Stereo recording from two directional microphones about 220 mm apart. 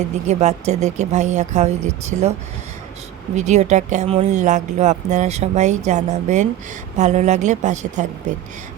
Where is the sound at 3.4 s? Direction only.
30° right (ahead or behind).